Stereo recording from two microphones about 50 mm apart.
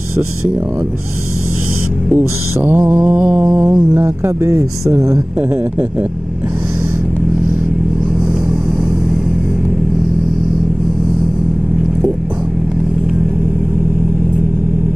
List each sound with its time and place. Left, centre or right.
2.1 s music: right
3.1 s music: right
3.6 s speech: right
4.9 s speech: right